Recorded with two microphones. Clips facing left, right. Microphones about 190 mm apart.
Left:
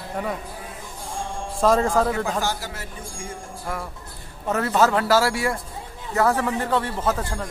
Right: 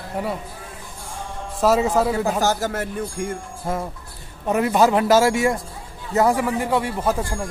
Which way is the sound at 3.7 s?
20° right (ahead or behind).